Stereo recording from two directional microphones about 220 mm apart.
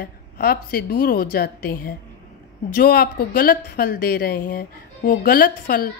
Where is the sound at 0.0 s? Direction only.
45° left (ahead or behind).